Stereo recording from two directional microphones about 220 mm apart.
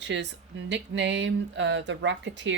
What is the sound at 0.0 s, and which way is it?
A woman's voice, 55° right (ahead or behind).